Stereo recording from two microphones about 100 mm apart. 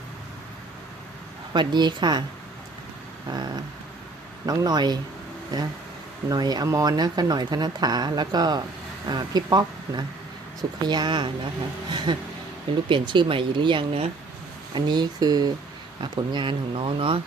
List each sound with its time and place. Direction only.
1.5 s speech: 50° right (ahead or behind)
3.3 s speech: 45° right (ahead or behind)
4.4 s speech: 40° right (ahead or behind)
16.0 s speech: 55° right (ahead or behind)